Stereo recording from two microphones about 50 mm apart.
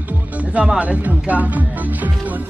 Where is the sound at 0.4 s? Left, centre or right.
Right.